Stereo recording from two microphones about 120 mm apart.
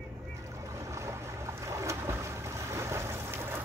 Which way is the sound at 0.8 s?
25° right (ahead or behind).